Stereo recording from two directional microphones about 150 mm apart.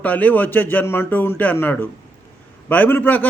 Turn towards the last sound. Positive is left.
turn(degrees=10)  # may be behind; listen again after turning